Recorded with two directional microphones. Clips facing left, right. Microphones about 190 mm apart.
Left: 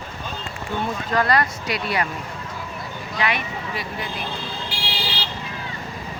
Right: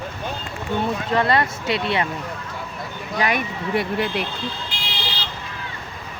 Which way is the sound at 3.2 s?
45° right (ahead or behind).